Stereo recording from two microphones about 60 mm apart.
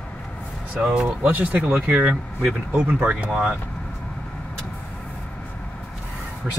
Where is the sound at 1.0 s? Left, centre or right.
Right.